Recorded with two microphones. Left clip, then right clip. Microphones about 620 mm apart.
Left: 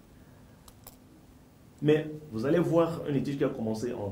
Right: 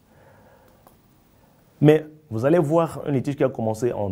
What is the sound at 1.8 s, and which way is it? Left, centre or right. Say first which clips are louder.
Speech: right 8 dB; right.